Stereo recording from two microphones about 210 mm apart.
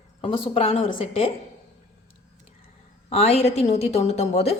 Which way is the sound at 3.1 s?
30° left (ahead or behind).